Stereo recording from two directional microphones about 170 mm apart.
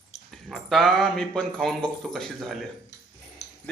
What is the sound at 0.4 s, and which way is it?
Speech, centre (ahead or behind).